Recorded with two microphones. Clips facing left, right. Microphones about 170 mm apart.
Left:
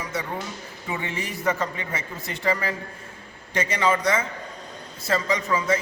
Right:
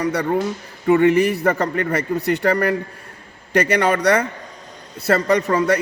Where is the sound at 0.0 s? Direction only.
70° right (ahead or behind).